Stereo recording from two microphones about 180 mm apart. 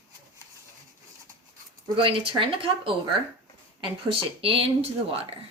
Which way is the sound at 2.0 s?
30° right (ahead or behind).